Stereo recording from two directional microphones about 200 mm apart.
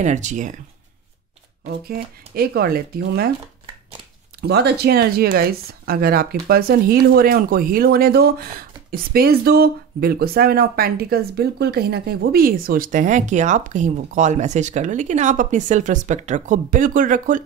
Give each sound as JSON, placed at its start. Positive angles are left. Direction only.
{"t": 0.0, "sound": "speech", "side_deg": -35}
{"t": 1.7, "sound": "speech", "side_deg": -50}
{"t": 4.4, "sound": "speech", "side_deg": -55}